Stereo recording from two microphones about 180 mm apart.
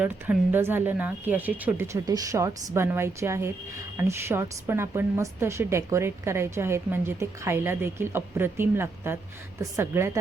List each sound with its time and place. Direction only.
0.0 s a woman's voice: 10° right (ahead or behind)